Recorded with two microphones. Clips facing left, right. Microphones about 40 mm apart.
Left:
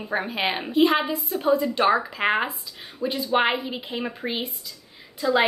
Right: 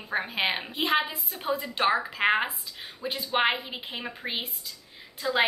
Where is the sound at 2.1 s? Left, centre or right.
Centre.